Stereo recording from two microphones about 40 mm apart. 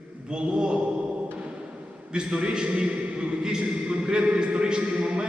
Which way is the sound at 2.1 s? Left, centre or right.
Right.